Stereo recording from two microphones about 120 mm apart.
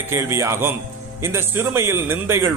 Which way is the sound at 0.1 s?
20° right (ahead or behind).